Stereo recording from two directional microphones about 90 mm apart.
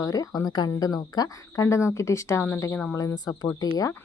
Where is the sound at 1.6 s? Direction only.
30° left (ahead or behind).